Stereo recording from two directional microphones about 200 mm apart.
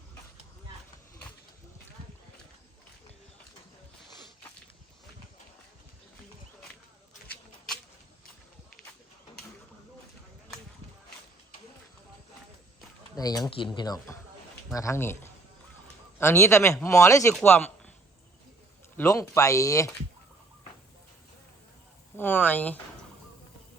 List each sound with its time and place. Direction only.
13.1 s speech: 20° left (ahead or behind)
18.9 s speech: 15° left (ahead or behind)
22.2 s a sound: 10° left (ahead or behind)